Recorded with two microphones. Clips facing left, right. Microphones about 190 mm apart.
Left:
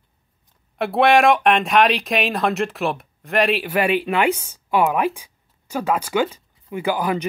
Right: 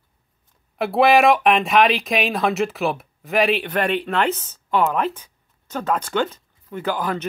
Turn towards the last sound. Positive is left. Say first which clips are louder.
# left 2 dB
turn(degrees=10)  # may be behind; listen again after turning